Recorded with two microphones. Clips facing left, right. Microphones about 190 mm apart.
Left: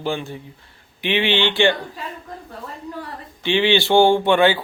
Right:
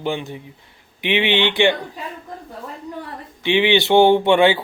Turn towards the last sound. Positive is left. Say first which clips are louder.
# right 2 dB
turn(degrees=-25)  # may be behind; listen again after turning